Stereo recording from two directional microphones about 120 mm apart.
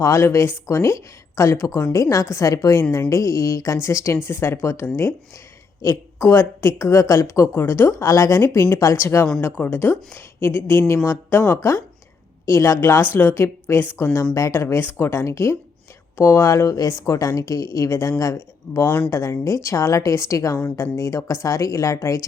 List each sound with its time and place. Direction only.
0.0 s a woman's voice: 25° left (ahead or behind)